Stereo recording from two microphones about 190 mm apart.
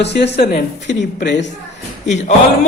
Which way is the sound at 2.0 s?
35° left (ahead or behind).